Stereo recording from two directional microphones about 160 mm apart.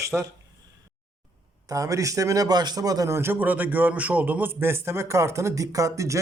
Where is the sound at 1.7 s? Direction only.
20° right (ahead or behind).